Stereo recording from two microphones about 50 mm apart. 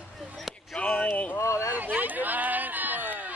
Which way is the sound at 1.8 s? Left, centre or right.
Right.